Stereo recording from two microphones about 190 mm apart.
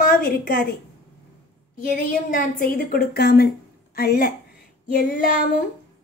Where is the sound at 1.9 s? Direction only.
45° left (ahead or behind).